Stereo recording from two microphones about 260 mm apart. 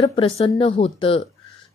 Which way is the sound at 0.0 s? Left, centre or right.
Left.